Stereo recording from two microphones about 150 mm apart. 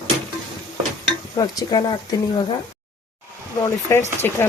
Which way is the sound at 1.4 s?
30° left (ahead or behind).